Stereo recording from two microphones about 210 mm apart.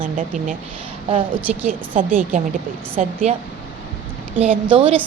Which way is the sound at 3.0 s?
35° right (ahead or behind).